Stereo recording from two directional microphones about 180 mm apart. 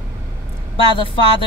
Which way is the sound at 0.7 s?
30° left (ahead or behind).